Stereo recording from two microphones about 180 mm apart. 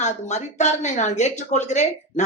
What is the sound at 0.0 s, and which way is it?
Speech, 40° left (ahead or behind).